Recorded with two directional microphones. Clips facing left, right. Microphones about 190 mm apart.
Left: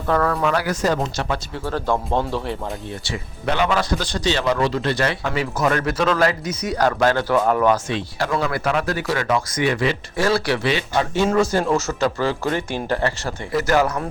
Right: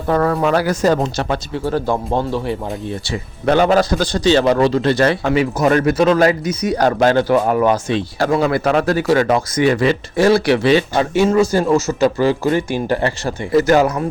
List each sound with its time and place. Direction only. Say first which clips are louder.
0.1 s speech: right 4 dB; 15° right (ahead or behind)
0.3 s speech: right 5 dB; 30° right (ahead or behind)
1.6 s speech: right 3 dB; 10° right (ahead or behind)
3.1 s speech: right 8 dB; 40° right (ahead or behind)
5.3 s speech: right 6 dB; 15° right (ahead or behind)
7.9 s speech: right 6 dB; 30° right (ahead or behind)
10.2 s speech: right 7 dB; 20° right (ahead or behind)
10.6 s speech: right 7 dB; 35° right (ahead or behind)
11.1 s speech: right 5 dB; 10° right (ahead or behind); by 13.8 s 25° right (ahead or behind)